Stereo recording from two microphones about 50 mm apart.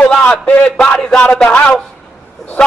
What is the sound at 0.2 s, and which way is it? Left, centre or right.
Speech, left.